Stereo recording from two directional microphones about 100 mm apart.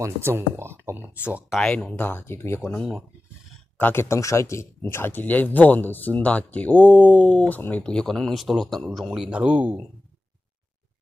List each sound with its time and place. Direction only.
0.0 s speech: 25° right (ahead or behind)
1.6 s speech: 10° left (ahead or behind); by 9.8 s 15° right (ahead or behind)